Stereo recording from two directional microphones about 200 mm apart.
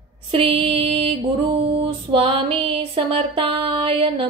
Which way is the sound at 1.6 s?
25° right (ahead or behind).